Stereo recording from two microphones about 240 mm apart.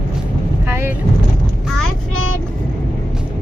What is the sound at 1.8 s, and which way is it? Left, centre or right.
Child singing, left.